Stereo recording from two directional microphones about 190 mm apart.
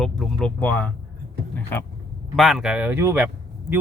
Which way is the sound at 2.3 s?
Centre (ahead or behind).